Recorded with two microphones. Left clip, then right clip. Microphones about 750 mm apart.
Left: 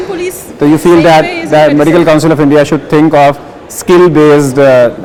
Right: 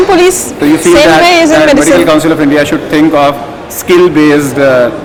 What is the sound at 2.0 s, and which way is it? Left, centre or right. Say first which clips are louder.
A man's voice: even; left.